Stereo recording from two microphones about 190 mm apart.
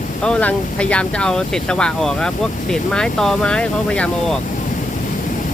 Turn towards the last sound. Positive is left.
turn(degrees=5)  # may be behind; listen again after turning